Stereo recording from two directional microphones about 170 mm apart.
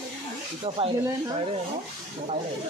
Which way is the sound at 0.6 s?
35° right (ahead or behind).